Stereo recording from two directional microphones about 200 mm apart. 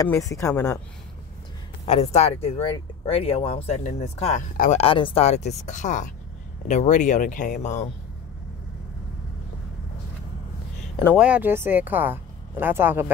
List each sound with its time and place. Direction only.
0.0 s speech: 15° left (ahead or behind)
1.9 s speech: 30° left (ahead or behind)
11.1 s speech: 5° right (ahead or behind)